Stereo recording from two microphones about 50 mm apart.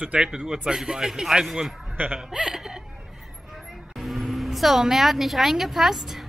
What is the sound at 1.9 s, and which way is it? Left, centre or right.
Speech, right.